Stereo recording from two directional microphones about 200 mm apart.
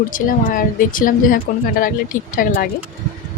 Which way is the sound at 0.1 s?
40° left (ahead or behind).